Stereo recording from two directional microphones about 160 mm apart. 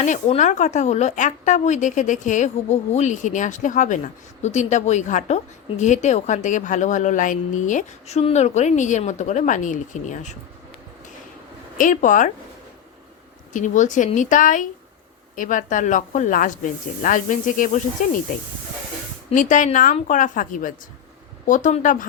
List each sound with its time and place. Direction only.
0.0 s a woman's voice: 50° left (ahead or behind)
11.8 s a woman's voice: 55° left (ahead or behind)
13.5 s a woman's voice: 50° left (ahead or behind)
19.3 s a woman's voice: 55° left (ahead or behind)